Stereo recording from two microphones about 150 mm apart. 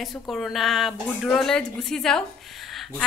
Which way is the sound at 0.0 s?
Centre (ahead or behind).